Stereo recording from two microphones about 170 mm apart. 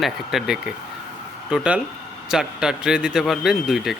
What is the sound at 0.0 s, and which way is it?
A man's voice, centre (ahead or behind).